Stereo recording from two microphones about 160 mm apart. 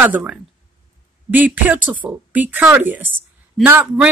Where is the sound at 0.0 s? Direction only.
10° right (ahead or behind).